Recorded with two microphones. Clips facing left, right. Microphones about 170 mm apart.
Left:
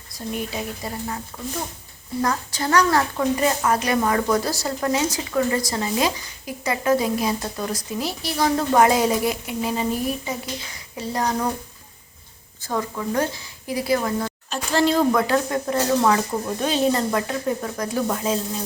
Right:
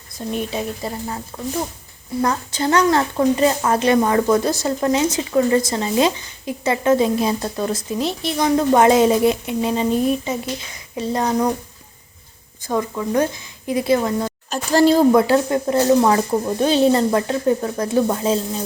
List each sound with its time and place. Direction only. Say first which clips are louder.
0.3 s a woman's voice: right 4 dB; 25° right (ahead or behind)
2.2 s a woman's voice: right 4 dB; 25° right (ahead or behind)
12.6 s a woman's voice: right 4 dB; 20° right (ahead or behind)
14.5 s speech: right 6 dB; 40° right (ahead or behind)
15.1 s a woman's voice: right 5 dB; 25° right (ahead or behind)